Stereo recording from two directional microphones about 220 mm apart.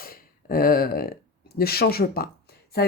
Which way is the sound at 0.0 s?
40° left (ahead or behind).